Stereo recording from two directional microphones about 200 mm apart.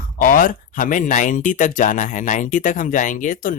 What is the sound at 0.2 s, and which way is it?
Speech, 45° left (ahead or behind).